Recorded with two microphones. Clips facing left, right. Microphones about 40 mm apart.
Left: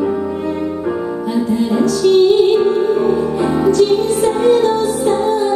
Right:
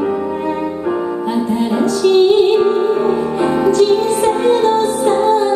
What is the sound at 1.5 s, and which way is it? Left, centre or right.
Music, right.